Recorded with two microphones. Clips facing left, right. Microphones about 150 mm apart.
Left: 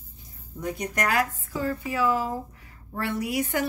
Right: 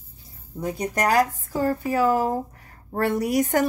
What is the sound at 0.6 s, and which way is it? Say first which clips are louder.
A woman's voice: right 4 dB; 30° right (ahead or behind).